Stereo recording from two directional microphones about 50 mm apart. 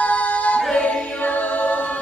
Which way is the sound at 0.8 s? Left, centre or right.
Left.